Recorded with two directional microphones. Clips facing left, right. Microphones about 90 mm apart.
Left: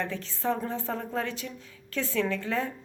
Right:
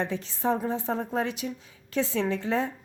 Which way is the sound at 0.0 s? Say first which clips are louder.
Right 3 dB; 20° right (ahead or behind).